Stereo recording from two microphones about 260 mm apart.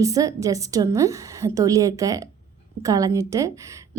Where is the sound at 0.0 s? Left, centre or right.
Centre.